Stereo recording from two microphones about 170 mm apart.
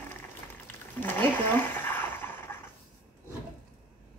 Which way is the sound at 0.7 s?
10° left (ahead or behind).